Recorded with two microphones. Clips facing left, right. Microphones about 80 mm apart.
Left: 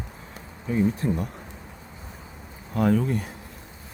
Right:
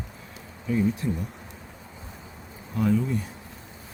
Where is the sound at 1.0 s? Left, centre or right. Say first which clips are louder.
Left 3 dB; left.